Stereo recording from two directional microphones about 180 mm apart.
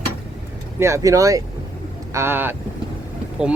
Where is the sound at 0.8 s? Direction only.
15° right (ahead or behind).